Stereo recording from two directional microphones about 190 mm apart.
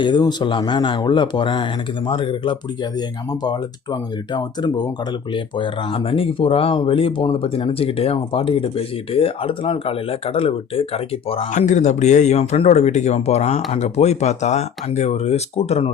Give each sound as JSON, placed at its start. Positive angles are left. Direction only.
{"t": 0.0, "sound": "speech", "side_deg": 25}
{"t": 4.3, "sound": "speech", "side_deg": 20}